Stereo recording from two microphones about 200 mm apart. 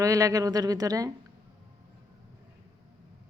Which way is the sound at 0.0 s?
15° right (ahead or behind).